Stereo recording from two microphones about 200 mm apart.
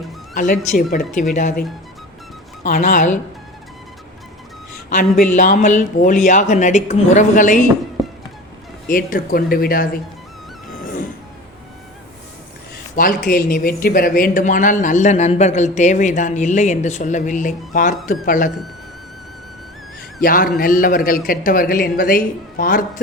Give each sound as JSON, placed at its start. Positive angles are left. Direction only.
{"t": 0.3, "sound": "a man's voice", "side_deg": 40}
{"t": 2.6, "sound": "a man's voice", "side_deg": 40}
{"t": 4.9, "sound": "a man's voice", "side_deg": 40}
{"t": 8.9, "sound": "a man's voice", "side_deg": 45}
{"t": 13.0, "sound": "a man's voice", "side_deg": 45}
{"t": 20.2, "sound": "a man's voice", "side_deg": 45}